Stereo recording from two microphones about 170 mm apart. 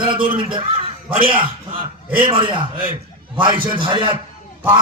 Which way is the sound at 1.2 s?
30° right (ahead or behind).